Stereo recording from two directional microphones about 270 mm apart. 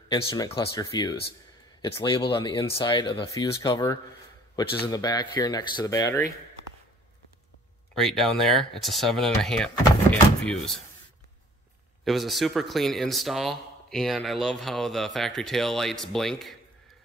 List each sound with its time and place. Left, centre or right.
0.1 s speech: centre
7.9 s speech: centre
12.0 s speech: centre